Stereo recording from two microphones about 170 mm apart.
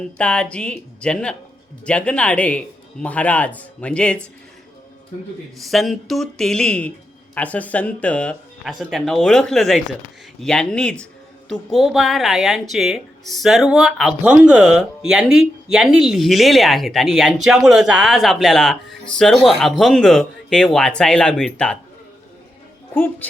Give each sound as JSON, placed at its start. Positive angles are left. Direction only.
{"t": 0.2, "sound": "speech", "side_deg": 5}
{"t": 5.6, "sound": "speech", "side_deg": 0}